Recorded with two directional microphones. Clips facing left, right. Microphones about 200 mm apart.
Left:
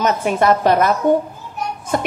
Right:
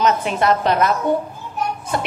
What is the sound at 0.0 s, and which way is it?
A woman's voice, 50° left (ahead or behind).